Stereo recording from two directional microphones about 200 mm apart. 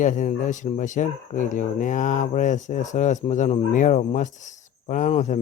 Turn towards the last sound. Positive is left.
turn(degrees=35)  # may be behind; listen again after turning